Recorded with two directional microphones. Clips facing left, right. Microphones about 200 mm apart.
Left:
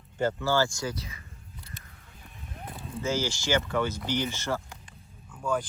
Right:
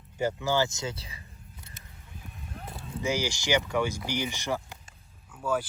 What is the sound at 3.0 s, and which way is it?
Speech, 15° right (ahead or behind).